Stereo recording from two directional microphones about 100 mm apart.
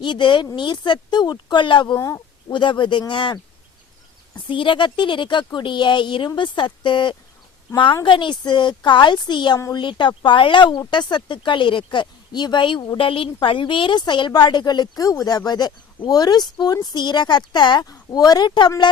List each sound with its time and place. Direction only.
0.0 s a woman's voice: 50° left (ahead or behind)
2.0 s speech: 30° left (ahead or behind)
2.5 s a woman's voice: 55° left (ahead or behind)
4.4 s a woman's voice: 55° left (ahead or behind)